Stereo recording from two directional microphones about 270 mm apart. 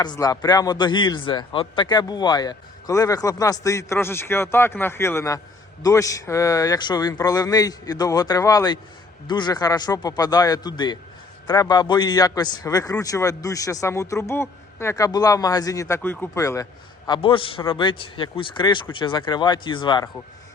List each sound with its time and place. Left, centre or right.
0.0 s a man's voice: centre